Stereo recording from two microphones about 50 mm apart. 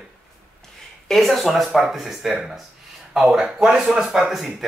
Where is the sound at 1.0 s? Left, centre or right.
Centre.